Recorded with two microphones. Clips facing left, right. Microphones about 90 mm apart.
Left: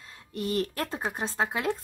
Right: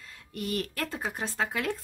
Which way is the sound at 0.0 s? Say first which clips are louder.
Left 3 dB; 25° left (ahead or behind).